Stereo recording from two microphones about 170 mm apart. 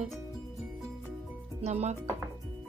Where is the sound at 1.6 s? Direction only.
40° right (ahead or behind).